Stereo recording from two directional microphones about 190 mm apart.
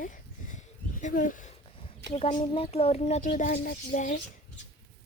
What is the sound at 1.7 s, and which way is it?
A woman's voice, 30° left (ahead or behind).